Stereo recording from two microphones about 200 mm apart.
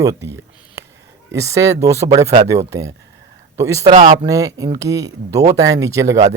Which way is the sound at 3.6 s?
15° right (ahead or behind).